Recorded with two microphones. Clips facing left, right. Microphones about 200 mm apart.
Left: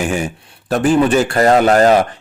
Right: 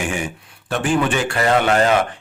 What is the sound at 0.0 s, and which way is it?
A man's voice, 40° left (ahead or behind).